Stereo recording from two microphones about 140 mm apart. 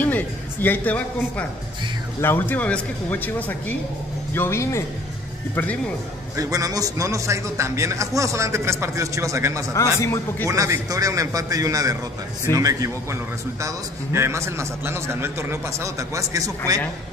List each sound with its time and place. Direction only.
0.0 s a sound: 15° left (ahead or behind)
2.2 s speech: 15° left (ahead or behind)
6.3 s a man's voice: 25° right (ahead or behind)
9.9 s speech: 20° left (ahead or behind)
10.4 s a man's voice: 20° right (ahead or behind)